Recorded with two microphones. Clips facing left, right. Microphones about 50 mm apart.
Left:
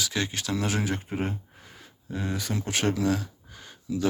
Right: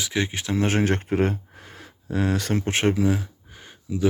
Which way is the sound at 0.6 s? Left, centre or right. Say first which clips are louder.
Right 9 dB; right.